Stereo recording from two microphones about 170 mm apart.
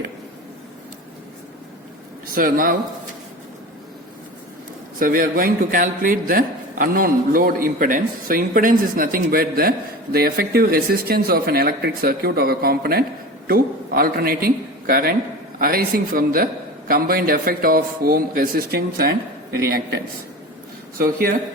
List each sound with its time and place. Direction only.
2.3 s a man's voice: 55° right (ahead or behind)
4.9 s a man's voice: 55° right (ahead or behind)